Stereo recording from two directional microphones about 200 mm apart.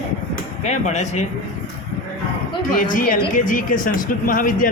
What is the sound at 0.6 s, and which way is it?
Speech, 35° left (ahead or behind).